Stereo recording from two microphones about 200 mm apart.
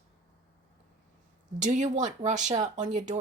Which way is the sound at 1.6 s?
35° right (ahead or behind).